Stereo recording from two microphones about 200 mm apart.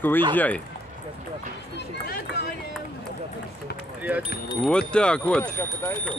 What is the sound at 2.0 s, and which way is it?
Run, 50° left (ahead or behind).